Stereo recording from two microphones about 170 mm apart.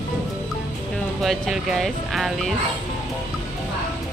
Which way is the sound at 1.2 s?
Centre (ahead or behind).